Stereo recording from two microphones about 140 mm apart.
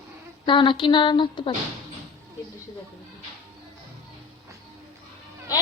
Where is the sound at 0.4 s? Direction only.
35° left (ahead or behind).